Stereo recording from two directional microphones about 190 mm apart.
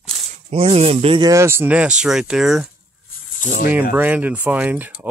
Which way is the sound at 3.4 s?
40° left (ahead or behind).